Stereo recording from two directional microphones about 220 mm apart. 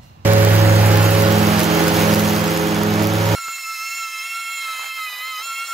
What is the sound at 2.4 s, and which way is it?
Rain, centre (ahead or behind).